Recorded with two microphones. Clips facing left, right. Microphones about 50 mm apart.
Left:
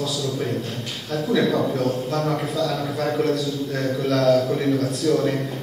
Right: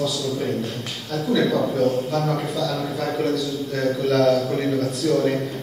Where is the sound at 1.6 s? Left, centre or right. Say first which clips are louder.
Right 2 dB; centre.